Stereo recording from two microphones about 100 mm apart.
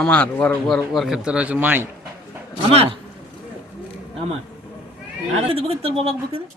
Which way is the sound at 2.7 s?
75° right (ahead or behind).